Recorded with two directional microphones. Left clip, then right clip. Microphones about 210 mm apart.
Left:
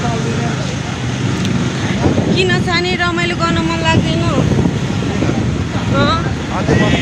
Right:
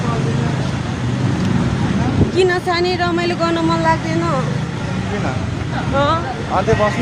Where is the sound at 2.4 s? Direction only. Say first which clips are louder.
Right 3 dB; 10° right (ahead or behind).